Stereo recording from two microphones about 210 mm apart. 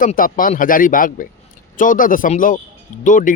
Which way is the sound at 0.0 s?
40° left (ahead or behind).